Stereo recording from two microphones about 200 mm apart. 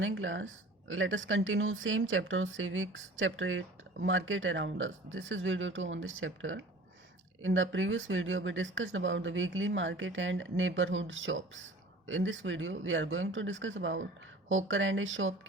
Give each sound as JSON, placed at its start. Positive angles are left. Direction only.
{"t": 0.0, "sound": "speech", "side_deg": -75}